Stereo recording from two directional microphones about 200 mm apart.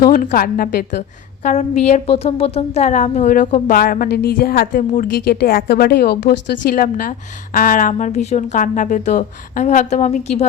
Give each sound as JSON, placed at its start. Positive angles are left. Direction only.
{"t": 0.0, "sound": "a woman's voice", "side_deg": 40}
{"t": 1.5, "sound": "a woman's voice", "side_deg": 35}